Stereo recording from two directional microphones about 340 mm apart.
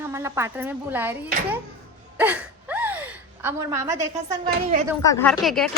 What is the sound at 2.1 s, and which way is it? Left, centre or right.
Gasp, centre.